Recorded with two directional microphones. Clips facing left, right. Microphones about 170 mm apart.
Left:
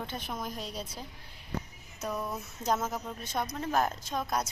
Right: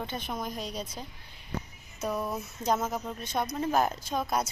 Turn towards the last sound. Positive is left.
turn(degrees=-5)  # may be behind; listen again after turning